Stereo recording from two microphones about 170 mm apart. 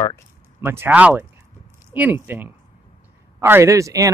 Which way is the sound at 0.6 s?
15° right (ahead or behind).